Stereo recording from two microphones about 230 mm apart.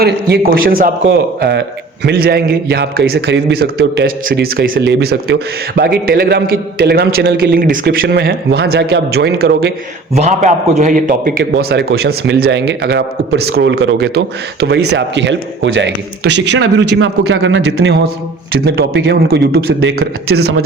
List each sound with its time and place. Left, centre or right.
0.0 s a man's voice: right
10.2 s a man's voice: right
20.3 s a man's voice: right